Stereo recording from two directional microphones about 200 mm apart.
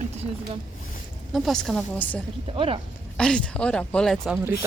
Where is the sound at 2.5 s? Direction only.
25° right (ahead or behind).